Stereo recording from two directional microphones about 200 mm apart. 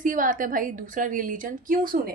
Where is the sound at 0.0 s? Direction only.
40° right (ahead or behind).